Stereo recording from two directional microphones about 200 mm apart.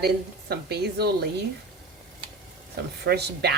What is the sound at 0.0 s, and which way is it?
A woman's voice, 55° right (ahead or behind).